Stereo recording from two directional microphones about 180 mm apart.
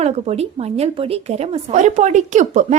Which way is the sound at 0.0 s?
35° right (ahead or behind).